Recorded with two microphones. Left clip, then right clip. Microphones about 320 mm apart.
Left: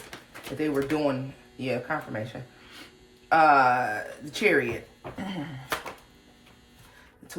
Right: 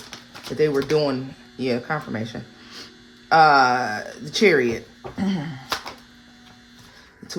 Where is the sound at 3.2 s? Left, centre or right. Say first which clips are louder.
Right 4 dB; right.